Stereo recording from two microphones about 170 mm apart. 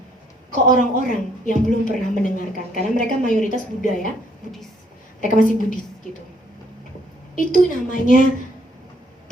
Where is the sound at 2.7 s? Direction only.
50° left (ahead or behind).